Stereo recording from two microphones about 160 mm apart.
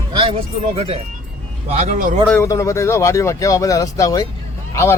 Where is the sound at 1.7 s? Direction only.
55° right (ahead or behind).